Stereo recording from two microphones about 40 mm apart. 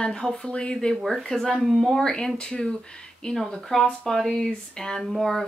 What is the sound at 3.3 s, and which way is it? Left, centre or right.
Speech, centre.